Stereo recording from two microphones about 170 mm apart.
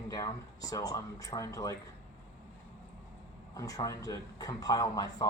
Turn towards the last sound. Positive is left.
turn(degrees=20)  # may be behind; listen again after turning